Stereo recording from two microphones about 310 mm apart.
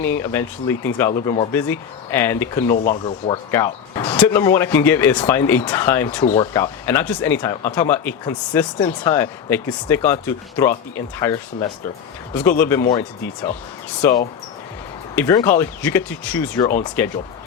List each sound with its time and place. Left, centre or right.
0.0 s speech: centre
2.7 s speech: left
3.0 s speech: centre